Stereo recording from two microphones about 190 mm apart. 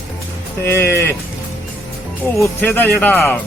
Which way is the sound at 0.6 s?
15° left (ahead or behind).